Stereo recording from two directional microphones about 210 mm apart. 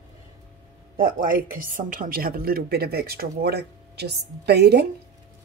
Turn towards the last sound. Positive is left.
turn(degrees=-50)  # may be behind; listen again after turning